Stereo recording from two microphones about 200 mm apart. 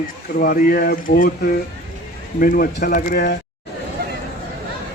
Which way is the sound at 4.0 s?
50° right (ahead or behind).